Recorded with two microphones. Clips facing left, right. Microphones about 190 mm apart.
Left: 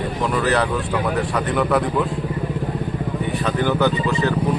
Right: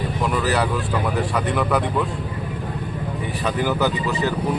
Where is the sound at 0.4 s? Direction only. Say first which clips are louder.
Left 3 dB; centre (ahead or behind).